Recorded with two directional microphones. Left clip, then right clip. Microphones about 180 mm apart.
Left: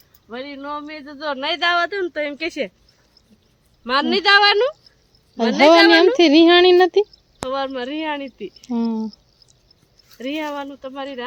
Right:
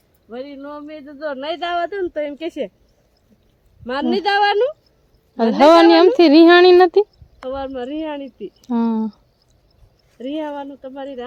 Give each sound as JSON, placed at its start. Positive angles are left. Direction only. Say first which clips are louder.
{"t": 0.3, "sound": "speech", "louder": "left 2 dB", "side_deg": -20}
{"t": 3.8, "sound": "speech", "louder": "left 3 dB", "side_deg": -20}
{"t": 7.5, "sound": "speech", "louder": "left 1 dB", "side_deg": -25}
{"t": 8.6, "sound": "speech", "louder": "right 3 dB", "side_deg": -15}
{"t": 10.2, "sound": "speech", "louder": "even", "side_deg": -20}